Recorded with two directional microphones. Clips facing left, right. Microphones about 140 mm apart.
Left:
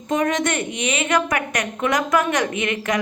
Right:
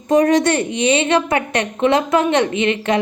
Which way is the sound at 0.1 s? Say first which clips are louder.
Right 7 dB; 35° right (ahead or behind).